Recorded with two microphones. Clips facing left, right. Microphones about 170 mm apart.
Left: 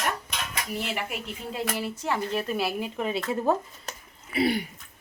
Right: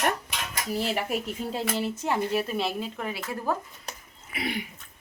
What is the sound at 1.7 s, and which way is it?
Speech, 20° right (ahead or behind).